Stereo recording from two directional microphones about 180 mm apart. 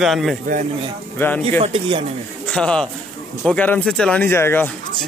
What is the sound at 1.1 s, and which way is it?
Speech, 10° left (ahead or behind).